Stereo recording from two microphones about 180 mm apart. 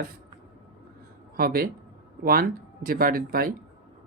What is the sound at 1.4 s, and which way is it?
Speech, 55° right (ahead or behind).